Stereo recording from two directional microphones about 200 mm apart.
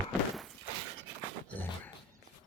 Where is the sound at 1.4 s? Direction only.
10° left (ahead or behind).